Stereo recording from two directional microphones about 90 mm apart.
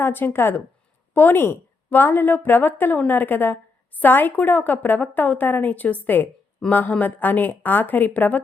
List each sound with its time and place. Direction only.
0.0 s a woman's voice: 25° left (ahead or behind)